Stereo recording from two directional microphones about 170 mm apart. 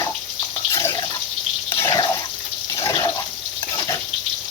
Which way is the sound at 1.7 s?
20° left (ahead or behind).